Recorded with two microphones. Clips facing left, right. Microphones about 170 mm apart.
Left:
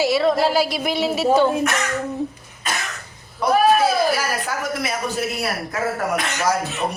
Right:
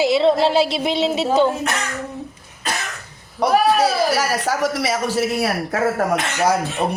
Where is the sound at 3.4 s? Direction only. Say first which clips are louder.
Even; 75° right (ahead or behind).